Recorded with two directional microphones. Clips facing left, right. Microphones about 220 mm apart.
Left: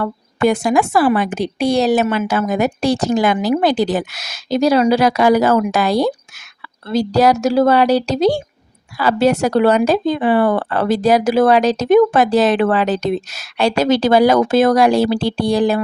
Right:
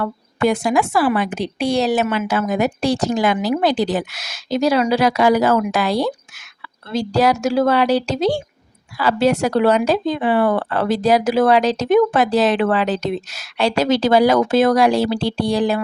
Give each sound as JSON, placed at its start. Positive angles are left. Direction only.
{"t": 0.4, "sound": "a woman's voice", "side_deg": 45}